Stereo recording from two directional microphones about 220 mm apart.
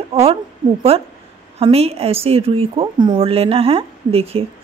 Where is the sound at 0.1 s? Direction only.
25° right (ahead or behind).